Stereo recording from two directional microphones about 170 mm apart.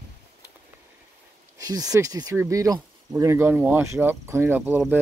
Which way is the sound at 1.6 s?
20° right (ahead or behind).